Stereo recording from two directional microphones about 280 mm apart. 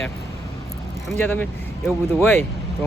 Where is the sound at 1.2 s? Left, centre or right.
Centre.